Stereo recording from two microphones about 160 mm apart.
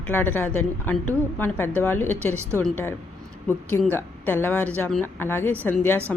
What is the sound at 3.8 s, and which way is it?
Speech, 15° left (ahead or behind).